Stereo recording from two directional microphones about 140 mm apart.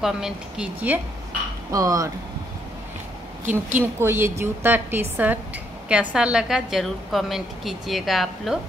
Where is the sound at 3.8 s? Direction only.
15° right (ahead or behind); by 8.6 s centre (ahead or behind).